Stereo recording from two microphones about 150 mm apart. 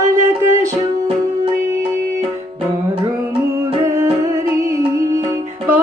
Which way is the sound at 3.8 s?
20° right (ahead or behind).